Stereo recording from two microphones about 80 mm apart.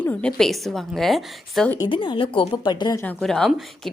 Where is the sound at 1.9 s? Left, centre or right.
Left.